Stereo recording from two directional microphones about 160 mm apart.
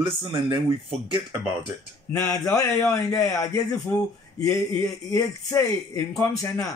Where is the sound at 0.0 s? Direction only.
30° right (ahead or behind).